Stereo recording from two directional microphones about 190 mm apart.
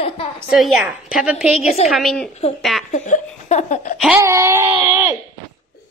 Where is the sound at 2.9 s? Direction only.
40° left (ahead or behind).